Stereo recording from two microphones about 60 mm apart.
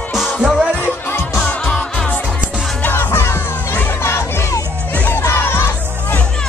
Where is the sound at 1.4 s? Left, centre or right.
Centre.